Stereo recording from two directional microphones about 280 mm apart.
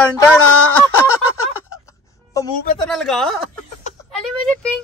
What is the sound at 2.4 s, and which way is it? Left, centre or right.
Speech, centre.